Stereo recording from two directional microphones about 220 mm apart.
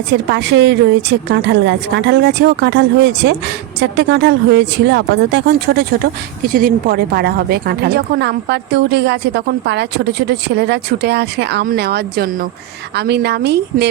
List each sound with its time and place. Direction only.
0.1 s a woman's voice: 50° right (ahead or behind)